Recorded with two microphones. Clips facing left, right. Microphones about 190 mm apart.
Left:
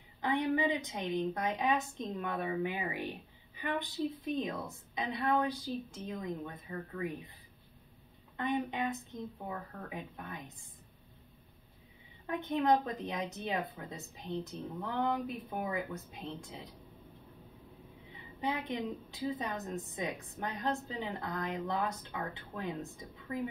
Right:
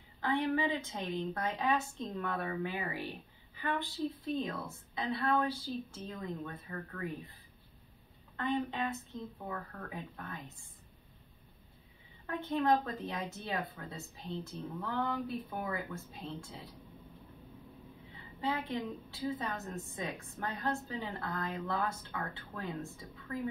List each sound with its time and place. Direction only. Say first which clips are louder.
0.2 s a woman's voice: left 1 dB; 15° left (ahead or behind)
8.4 s a woman's voice: even; 15° left (ahead or behind)
12.3 s a woman's voice: left 1 dB; 15° left (ahead or behind)
18.4 s a woman's voice: even; 15° left (ahead or behind)